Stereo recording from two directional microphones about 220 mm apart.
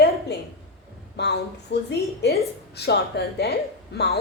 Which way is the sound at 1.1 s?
50° left (ahead or behind).